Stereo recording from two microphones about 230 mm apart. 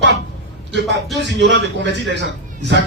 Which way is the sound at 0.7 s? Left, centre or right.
Right.